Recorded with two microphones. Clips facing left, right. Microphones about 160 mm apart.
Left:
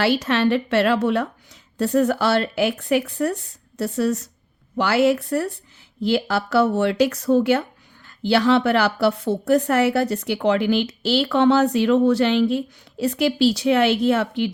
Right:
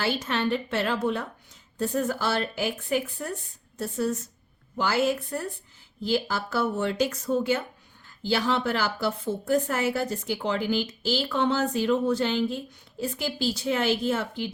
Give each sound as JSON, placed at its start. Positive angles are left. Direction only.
{"t": 0.0, "sound": "speech", "side_deg": 75}